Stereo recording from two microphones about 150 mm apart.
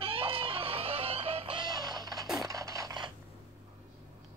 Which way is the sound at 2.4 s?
20° right (ahead or behind).